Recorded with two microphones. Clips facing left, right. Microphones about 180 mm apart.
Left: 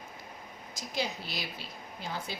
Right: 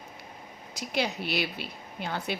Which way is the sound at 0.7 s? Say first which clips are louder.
Right 5 dB; 70° right (ahead or behind).